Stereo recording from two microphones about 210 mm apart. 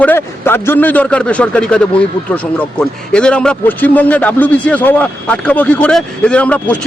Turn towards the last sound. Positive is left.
turn(degrees=5)  # may be behind; listen again after turning